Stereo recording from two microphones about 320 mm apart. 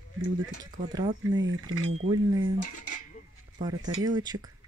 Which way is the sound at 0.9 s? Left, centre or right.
Centre.